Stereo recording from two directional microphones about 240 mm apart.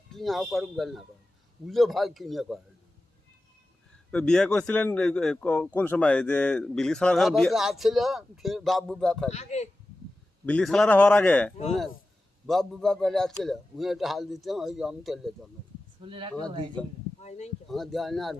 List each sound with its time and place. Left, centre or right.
0.1 s speech: centre
4.1 s speech: centre
9.3 s speech: left
10.4 s speech: centre
16.0 s speech: right
17.2 s a sound: left
17.7 s speech: centre